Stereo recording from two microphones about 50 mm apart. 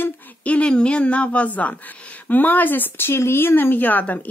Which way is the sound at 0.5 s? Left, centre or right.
Left.